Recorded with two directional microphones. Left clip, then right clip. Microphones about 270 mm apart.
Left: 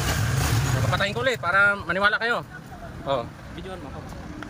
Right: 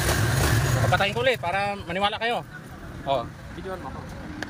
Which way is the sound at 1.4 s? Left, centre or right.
Left.